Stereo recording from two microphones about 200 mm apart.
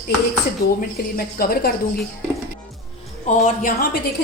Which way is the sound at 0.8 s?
45° left (ahead or behind).